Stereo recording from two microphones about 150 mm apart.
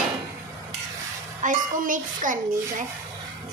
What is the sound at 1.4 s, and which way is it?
A child's voice, 60° right (ahead or behind).